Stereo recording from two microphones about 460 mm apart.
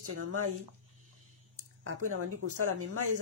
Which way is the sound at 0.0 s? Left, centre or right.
Right.